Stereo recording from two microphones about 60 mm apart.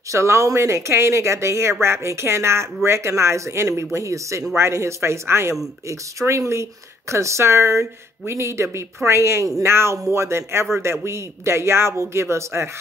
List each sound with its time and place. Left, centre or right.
0.1 s speech: right